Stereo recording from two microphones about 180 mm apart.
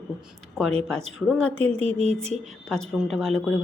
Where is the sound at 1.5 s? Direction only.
35° right (ahead or behind).